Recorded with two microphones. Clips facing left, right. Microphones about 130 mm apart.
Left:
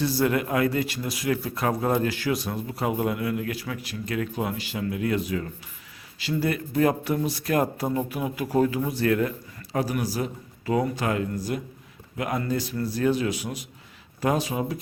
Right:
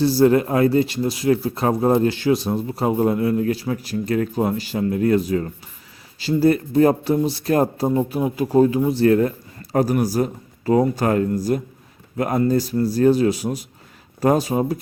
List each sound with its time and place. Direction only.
0.0 s speech: 35° right (ahead or behind)
9.7 s a man's voice: 45° right (ahead or behind)